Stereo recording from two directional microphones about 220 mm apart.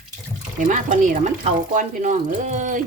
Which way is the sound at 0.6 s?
35° right (ahead or behind).